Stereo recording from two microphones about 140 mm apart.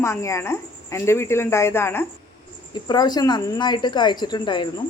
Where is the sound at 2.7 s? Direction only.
30° left (ahead or behind).